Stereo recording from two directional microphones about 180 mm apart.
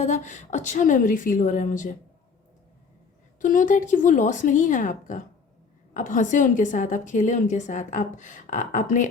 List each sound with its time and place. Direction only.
0.0 s a woman's voice: 40° left (ahead or behind)
3.4 s a woman's voice: 45° left (ahead or behind)